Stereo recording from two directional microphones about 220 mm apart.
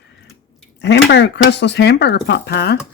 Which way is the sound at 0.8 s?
50° left (ahead or behind).